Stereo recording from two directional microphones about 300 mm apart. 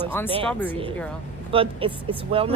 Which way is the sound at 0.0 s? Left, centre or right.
Centre.